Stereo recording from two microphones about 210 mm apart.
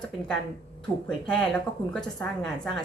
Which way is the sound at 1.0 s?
5° left (ahead or behind).